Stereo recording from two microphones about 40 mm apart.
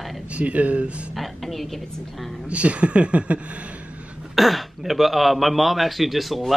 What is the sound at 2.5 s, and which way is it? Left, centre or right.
Speech, right.